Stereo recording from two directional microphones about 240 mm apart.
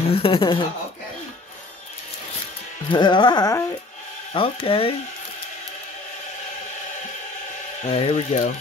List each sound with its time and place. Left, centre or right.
0.1 s speech: left
2.9 s carnatic music: centre
4.3 s speech: left
7.8 s speech: left